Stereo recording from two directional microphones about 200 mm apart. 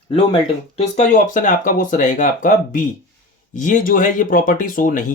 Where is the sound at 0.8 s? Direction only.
35° left (ahead or behind).